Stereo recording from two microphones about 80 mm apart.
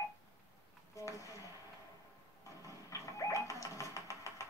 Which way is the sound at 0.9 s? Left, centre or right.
Left.